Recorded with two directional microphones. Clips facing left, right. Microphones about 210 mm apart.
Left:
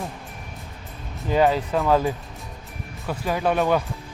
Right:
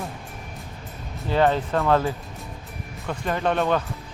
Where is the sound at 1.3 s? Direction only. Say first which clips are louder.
Left 1 dB; 10° left (ahead or behind).